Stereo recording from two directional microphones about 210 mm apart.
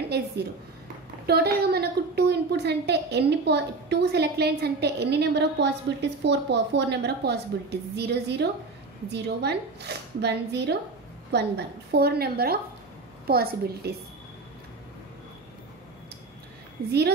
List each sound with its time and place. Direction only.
1.2 s a woman's voice: 50° right (ahead or behind)